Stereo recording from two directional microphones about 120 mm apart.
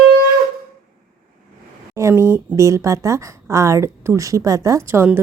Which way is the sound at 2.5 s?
25° right (ahead or behind).